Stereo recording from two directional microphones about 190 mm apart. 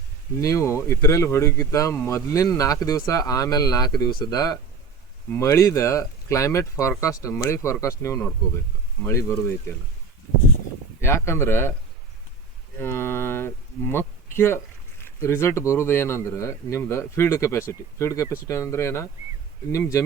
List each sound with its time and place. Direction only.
0.4 s speech: 15° left (ahead or behind)
11.0 s speech: 15° left (ahead or behind)
12.8 s speech: 10° left (ahead or behind)